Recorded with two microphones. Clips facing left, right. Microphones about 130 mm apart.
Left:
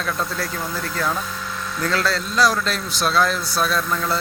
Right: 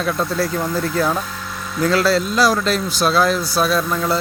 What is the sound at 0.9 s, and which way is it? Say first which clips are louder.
Speech: right 4 dB; 20° right (ahead or behind).